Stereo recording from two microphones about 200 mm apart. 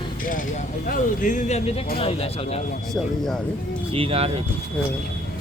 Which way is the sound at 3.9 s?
30° right (ahead or behind).